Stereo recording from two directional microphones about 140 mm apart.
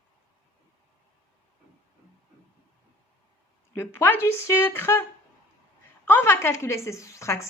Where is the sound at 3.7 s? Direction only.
15° left (ahead or behind).